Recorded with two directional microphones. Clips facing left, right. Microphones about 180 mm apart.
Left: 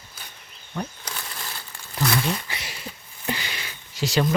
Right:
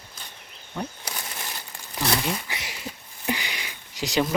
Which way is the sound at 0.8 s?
15° right (ahead or behind).